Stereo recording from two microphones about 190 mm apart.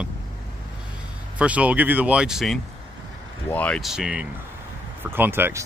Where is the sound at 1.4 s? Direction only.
5° right (ahead or behind).